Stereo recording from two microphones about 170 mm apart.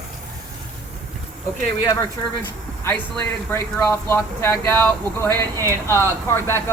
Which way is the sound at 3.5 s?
15° left (ahead or behind).